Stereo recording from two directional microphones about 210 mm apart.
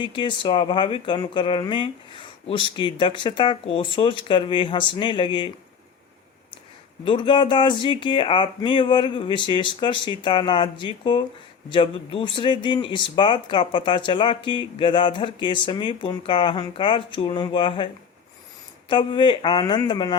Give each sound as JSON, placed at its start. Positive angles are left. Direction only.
{"t": 0.0, "sound": "speech", "side_deg": 20}
{"t": 7.0, "sound": "speech", "side_deg": 25}
{"t": 18.9, "sound": "speech", "side_deg": 20}